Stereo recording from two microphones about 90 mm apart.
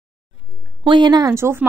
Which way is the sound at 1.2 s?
30° right (ahead or behind).